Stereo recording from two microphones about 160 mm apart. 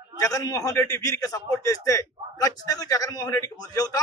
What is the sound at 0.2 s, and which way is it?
A man's voice, 20° left (ahead or behind).